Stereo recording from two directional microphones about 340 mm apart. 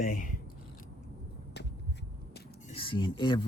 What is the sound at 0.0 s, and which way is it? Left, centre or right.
Speech, left.